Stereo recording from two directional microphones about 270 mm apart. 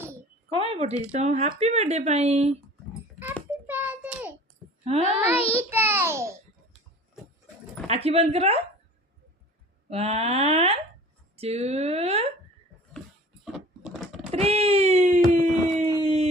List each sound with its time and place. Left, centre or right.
0.5 s speech: right
3.7 s a sound: centre
4.9 s speech: right
5.3 s a child's voice: left
5.5 s a child's voice: centre
7.9 s speech: right
9.9 s speech: right
13.4 s a sound: centre
14.3 s wail: right
15.3 s a sound: right